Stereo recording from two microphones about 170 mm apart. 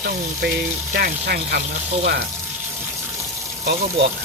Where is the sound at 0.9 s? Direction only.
65° right (ahead or behind).